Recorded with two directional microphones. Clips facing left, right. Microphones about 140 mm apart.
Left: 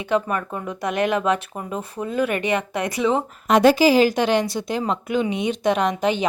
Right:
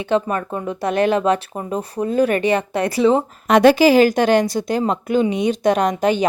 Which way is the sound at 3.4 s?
70° right (ahead or behind).